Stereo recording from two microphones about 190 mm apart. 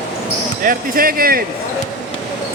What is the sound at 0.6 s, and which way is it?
Speech, 50° right (ahead or behind).